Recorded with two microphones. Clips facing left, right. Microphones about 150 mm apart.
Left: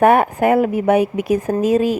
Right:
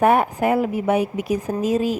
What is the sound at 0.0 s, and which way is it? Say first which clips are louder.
A woman's voice: left 4 dB; 65° left (ahead or behind).